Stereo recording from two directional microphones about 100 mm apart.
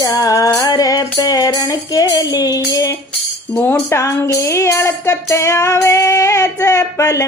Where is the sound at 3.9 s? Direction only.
30° left (ahead or behind).